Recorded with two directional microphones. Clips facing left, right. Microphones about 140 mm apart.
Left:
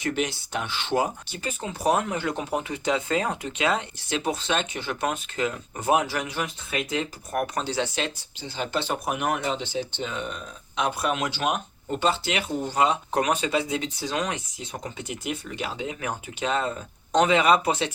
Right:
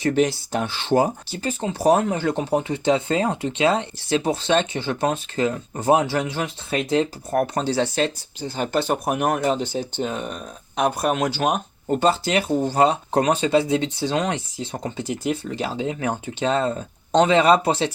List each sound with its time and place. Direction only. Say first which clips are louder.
0.0 s speech: right 8 dB; 35° right (ahead or behind)